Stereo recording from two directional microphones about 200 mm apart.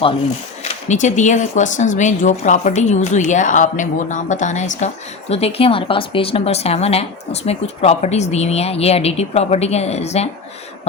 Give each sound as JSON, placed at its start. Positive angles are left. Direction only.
{"t": 0.6, "sound": "speech", "side_deg": 35}